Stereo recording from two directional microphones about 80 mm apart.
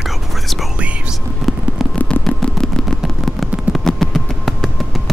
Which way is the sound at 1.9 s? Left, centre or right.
Centre.